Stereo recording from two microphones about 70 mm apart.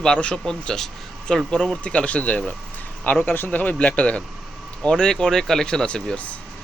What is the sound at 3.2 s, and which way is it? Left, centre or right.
A man's voice, left.